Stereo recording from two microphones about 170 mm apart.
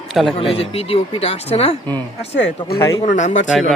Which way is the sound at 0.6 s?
35° left (ahead or behind).